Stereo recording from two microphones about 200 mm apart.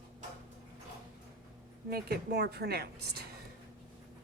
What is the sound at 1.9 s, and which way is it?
A woman's voice, 55° right (ahead or behind).